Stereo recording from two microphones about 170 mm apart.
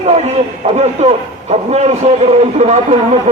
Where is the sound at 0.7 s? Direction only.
40° right (ahead or behind).